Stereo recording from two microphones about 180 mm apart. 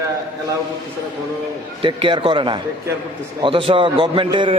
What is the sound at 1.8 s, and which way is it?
A man's voice, 25° right (ahead or behind).